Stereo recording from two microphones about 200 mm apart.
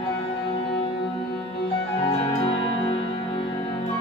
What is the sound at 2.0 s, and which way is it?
Music, 25° left (ahead or behind).